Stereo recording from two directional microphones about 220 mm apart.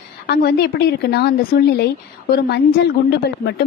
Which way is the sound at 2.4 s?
50° left (ahead or behind).